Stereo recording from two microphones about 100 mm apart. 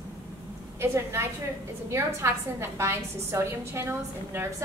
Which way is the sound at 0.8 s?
25° right (ahead or behind).